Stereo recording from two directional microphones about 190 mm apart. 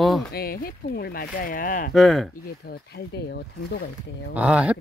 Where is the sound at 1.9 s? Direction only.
Centre (ahead or behind).